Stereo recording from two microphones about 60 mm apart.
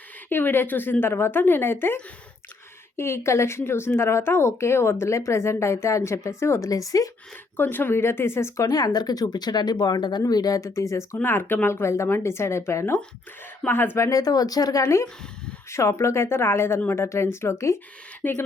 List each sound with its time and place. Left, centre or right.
0.3 s speech: left
6.7 s speech: left
7.5 s speech: left
8.7 s speech: left
11.2 s speech: left
14.0 s speech: left
18.2 s speech: left